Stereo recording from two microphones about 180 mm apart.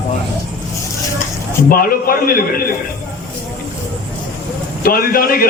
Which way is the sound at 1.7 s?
55° left (ahead or behind).